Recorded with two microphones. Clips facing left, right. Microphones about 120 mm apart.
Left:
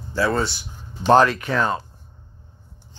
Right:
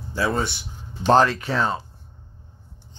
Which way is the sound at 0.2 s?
15° right (ahead or behind).